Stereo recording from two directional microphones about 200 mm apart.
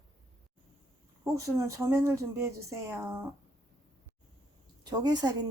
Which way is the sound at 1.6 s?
15° right (ahead or behind).